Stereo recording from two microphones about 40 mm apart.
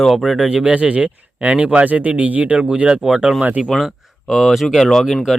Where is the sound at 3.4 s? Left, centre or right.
Right.